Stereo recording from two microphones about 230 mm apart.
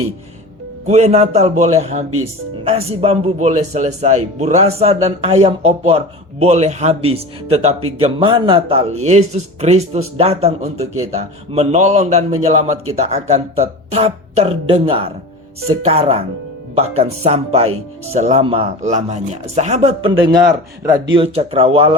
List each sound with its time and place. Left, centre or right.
0.9 s a man's voice: right